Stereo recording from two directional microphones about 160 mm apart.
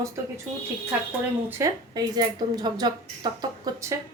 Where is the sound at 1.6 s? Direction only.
25° right (ahead or behind).